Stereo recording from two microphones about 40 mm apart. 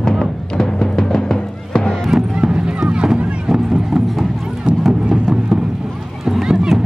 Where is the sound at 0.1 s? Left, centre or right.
Centre.